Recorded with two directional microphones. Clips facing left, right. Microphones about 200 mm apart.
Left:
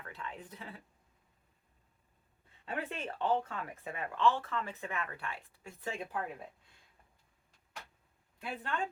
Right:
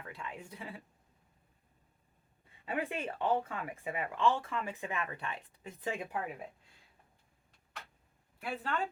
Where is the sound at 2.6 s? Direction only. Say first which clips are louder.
Right 3 dB; 10° right (ahead or behind).